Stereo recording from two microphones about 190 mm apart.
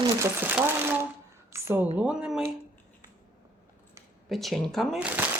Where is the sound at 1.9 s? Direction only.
5° right (ahead or behind).